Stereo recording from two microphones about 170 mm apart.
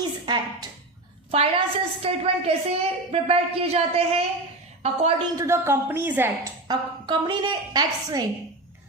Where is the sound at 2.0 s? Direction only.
35° right (ahead or behind).